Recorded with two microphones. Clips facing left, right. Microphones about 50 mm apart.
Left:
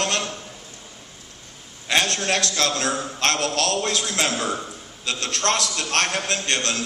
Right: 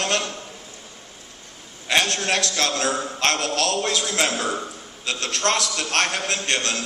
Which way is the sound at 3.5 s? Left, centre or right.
Left.